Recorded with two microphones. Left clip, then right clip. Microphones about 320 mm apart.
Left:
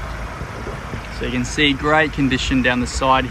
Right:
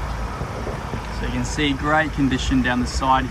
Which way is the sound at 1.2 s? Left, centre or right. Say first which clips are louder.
Left 6 dB; centre.